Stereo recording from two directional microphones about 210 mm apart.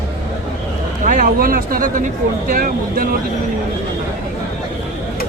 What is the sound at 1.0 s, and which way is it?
Speech, 40° right (ahead or behind).